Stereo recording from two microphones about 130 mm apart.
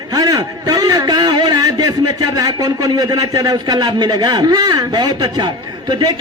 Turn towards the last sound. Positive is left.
turn(degrees=-30)  # may be behind; listen again after turning